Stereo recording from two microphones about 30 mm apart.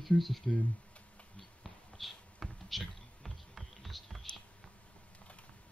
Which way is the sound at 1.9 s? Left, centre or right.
Centre.